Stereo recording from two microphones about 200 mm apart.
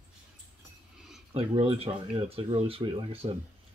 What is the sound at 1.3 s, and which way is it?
Speech, 25° right (ahead or behind).